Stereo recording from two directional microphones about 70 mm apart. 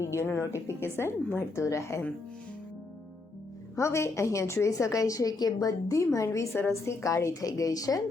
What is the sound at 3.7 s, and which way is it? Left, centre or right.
A woman's voice, left.